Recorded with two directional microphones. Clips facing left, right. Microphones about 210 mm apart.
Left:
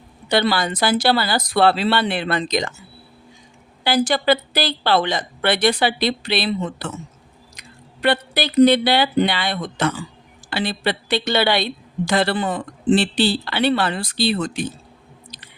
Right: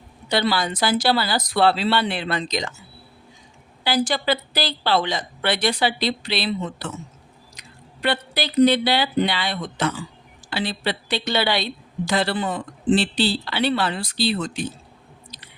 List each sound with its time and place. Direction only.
0.3 s a woman's voice: 55° left (ahead or behind)
3.8 s a woman's voice: 55° left (ahead or behind)
8.0 s a woman's voice: 55° left (ahead or behind)